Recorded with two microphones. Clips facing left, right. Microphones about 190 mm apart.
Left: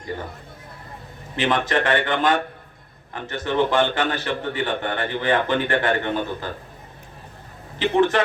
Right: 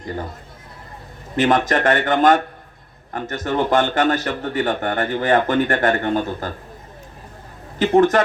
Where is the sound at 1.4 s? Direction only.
45° right (ahead or behind).